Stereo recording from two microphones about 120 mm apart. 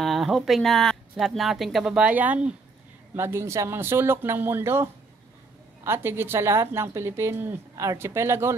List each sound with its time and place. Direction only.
0.0 s a woman's voice: centre (ahead or behind); by 4.8 s 20° right (ahead or behind)
5.9 s a woman's voice: 20° right (ahead or behind)